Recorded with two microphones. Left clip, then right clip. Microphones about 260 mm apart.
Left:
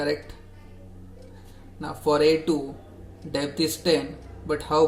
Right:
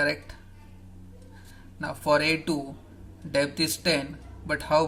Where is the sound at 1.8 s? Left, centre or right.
Right.